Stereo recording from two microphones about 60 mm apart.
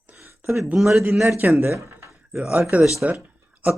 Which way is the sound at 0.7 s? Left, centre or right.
Centre.